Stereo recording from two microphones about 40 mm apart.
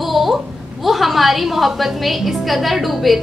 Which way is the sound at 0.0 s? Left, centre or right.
Centre.